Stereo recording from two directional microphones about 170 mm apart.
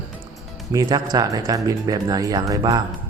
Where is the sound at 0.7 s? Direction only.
20° right (ahead or behind).